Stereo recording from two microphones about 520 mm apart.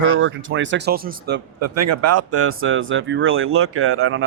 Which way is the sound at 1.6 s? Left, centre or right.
Right.